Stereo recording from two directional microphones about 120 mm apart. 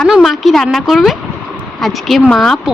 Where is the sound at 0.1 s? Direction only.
Centre (ahead or behind).